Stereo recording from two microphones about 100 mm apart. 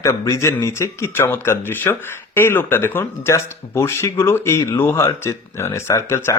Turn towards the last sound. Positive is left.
turn(degrees=30)  # may be behind; listen again after turning